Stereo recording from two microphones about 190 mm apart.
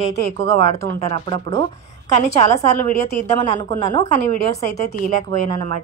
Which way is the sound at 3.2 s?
35° left (ahead or behind).